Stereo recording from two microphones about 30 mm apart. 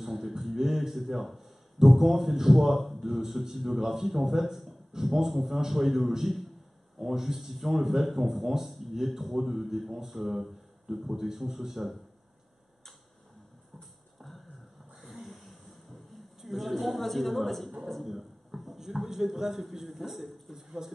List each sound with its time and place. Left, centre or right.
0.0 s music: centre
0.3 s beatboxing: centre
1.8 s a man's voice: centre
15.0 s a sound: centre
16.3 s a man's voice: centre
18.0 s a sound: centre
18.8 s a man's voice: centre
20.8 s a man's voice: centre